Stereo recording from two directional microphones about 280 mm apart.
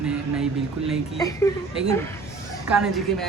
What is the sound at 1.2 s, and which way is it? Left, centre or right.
Speech, centre.